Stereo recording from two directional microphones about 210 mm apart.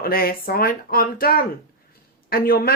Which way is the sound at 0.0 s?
45° left (ahead or behind).